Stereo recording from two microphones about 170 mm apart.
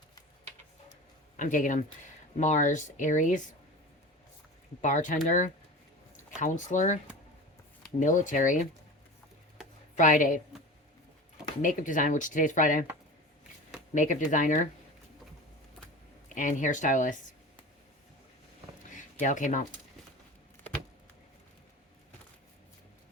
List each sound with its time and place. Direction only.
1.4 s speech: 50° left (ahead or behind)
4.8 s speech: 50° left (ahead or behind)
9.9 s speech: 50° left (ahead or behind)
11.6 s speech: 50° left (ahead or behind)
13.9 s speech: 45° left (ahead or behind)
16.3 s speech: 50° left (ahead or behind)
19.2 s speech: 45° left (ahead or behind)